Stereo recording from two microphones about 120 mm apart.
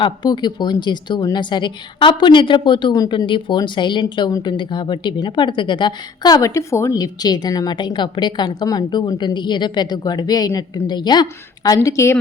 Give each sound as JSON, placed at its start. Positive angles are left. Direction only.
{"t": 0.0, "sound": "a woman's voice", "side_deg": 40}